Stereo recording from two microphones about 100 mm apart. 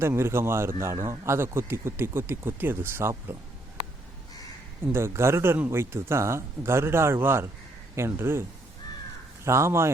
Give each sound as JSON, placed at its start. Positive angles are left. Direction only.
{"t": 0.0, "sound": "a man's voice", "side_deg": -25}
{"t": 4.9, "sound": "a man's voice", "side_deg": -25}